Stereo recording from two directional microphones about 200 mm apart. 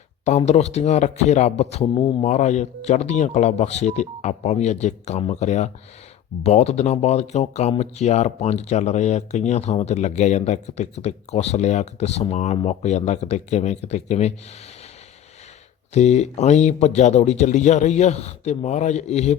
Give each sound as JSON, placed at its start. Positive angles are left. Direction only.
{"t": 0.3, "sound": "speech", "side_deg": 35}
{"t": 15.9, "sound": "speech", "side_deg": 35}